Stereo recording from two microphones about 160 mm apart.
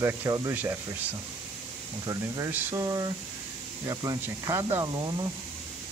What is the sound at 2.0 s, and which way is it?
Speech, 20° right (ahead or behind).